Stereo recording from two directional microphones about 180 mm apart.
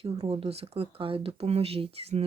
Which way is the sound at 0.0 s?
30° right (ahead or behind).